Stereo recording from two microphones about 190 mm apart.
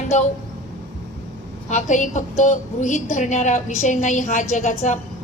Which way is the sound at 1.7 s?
40° left (ahead or behind).